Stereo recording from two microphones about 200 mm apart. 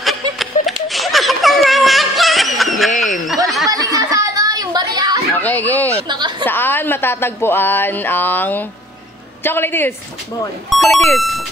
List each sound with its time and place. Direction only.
0.0 s a sound: centre (ahead or behind)
3.0 s snicker: centre (ahead or behind)
3.7 s a sound: 15° right (ahead or behind)
5.3 s speech: 10° left (ahead or behind)
6.0 s a woman's voice: 20° right (ahead or behind)
6.4 s speech: 10° left (ahead or behind)
11.1 s music: centre (ahead or behind)